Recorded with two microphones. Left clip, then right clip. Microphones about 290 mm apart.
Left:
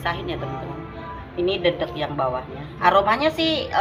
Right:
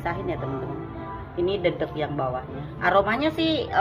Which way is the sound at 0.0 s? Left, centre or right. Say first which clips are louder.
Left 2 dB; centre.